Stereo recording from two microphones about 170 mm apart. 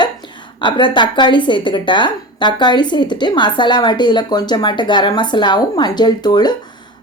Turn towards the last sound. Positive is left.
turn(degrees=25)  # may be behind; listen again after turning